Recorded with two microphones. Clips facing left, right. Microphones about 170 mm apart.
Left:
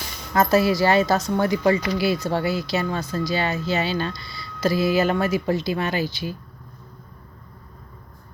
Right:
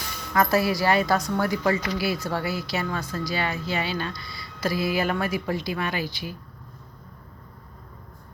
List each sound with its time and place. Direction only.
0.3 s speech: 25° left (ahead or behind)